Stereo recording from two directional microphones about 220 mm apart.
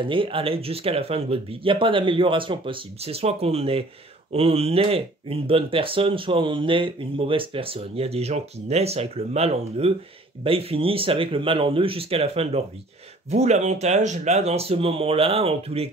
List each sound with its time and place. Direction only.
0.0 s speech: 25° right (ahead or behind)